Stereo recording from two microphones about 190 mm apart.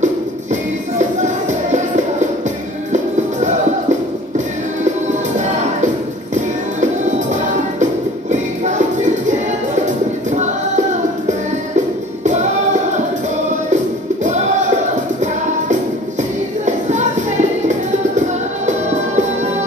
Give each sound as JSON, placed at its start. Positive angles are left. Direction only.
{"t": 0.0, "sound": "music", "side_deg": -40}
{"t": 5.4, "sound": "music", "side_deg": -40}
{"t": 7.8, "sound": "music", "side_deg": -40}
{"t": 14.2, "sound": "music", "side_deg": -40}
{"t": 16.6, "sound": "music", "side_deg": -40}